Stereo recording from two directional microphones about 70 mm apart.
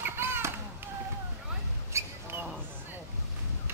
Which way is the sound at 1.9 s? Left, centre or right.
Right.